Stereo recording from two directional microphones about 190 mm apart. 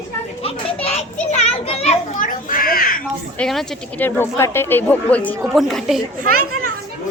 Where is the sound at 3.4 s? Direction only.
Centre (ahead or behind).